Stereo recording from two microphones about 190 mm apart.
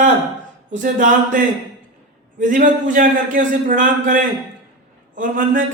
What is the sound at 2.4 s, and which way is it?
A man's voice, 45° right (ahead or behind).